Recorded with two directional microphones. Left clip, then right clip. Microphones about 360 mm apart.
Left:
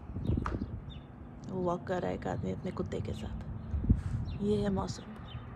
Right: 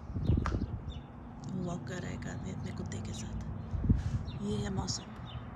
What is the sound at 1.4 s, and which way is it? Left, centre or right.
Speech, centre.